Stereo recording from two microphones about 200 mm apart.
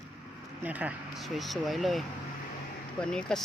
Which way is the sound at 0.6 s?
5° right (ahead or behind).